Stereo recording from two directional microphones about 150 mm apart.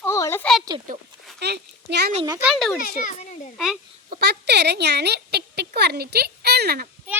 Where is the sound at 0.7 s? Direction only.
30° right (ahead or behind).